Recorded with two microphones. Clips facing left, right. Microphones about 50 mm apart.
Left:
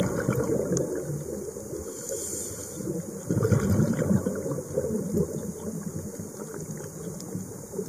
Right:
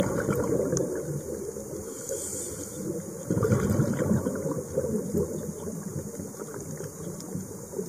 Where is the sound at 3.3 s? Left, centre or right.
Centre.